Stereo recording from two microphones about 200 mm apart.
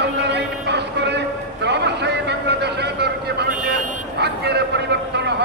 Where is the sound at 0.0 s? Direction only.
60° right (ahead or behind).